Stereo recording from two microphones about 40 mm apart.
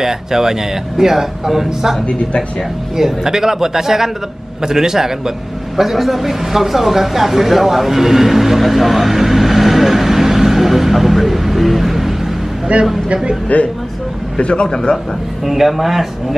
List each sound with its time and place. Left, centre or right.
0.0 s speech: centre
3.0 s speech: centre
5.8 s a sound: centre
12.7 s a man's voice: right
13.5 s a man's voice: left
15.4 s speech: centre